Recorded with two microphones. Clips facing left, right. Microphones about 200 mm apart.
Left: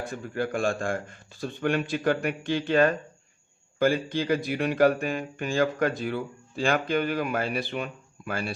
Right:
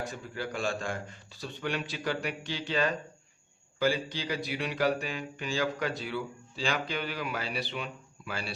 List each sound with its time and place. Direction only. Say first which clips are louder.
0.0 s speech: left 6 dB; 55° left (ahead or behind)